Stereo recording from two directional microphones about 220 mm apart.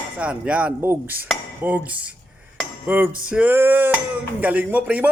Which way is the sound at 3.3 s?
10° right (ahead or behind).